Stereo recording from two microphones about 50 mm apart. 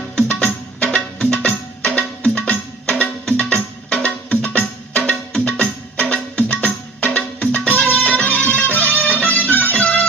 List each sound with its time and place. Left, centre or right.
0.2 s music: centre
3.2 s music: centre